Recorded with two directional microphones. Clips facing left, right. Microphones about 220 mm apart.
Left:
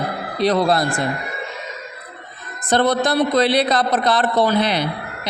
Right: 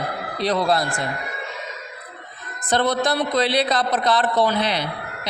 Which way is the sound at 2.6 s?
45° left (ahead or behind).